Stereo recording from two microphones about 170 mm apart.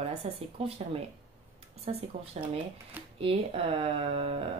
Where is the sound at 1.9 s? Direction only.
40° right (ahead or behind).